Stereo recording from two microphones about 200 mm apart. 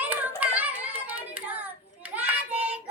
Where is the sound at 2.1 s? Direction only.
5° right (ahead or behind).